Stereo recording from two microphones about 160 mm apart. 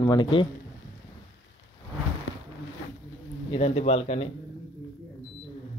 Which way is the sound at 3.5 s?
40° left (ahead or behind).